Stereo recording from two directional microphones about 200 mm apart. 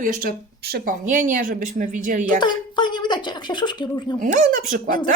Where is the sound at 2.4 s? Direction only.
20° left (ahead or behind).